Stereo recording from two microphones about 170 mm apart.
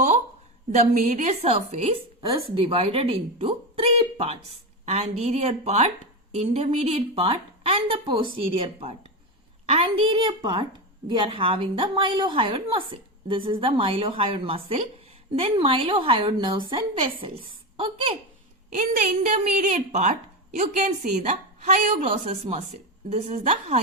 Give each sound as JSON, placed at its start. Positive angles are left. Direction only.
{"t": 0.8, "sound": "a woman's voice", "side_deg": -45}
{"t": 18.8, "sound": "a woman's voice", "side_deg": -45}